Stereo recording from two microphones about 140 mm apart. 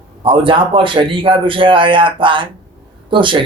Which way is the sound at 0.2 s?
35° right (ahead or behind).